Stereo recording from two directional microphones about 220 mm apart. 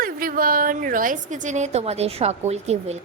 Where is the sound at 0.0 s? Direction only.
40° right (ahead or behind).